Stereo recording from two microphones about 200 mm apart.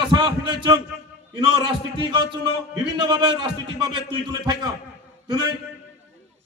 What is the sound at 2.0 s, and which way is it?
A man's voice, 20° right (ahead or behind).